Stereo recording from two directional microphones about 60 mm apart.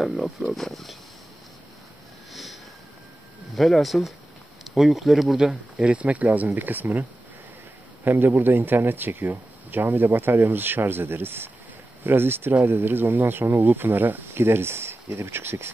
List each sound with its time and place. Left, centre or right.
0.2 s speech: centre
2.3 s vehicle: centre
3.5 s speech: centre
5.4 s speech: centre
8.0 s speech: right